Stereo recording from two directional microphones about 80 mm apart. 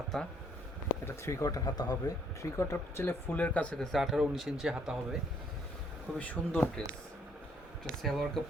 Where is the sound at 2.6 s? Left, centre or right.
Left; by 3.9 s centre.